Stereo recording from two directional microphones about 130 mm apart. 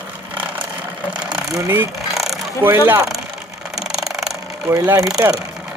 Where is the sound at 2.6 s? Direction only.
15° right (ahead or behind).